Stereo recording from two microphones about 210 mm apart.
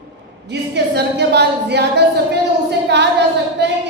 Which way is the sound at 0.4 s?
55° right (ahead or behind).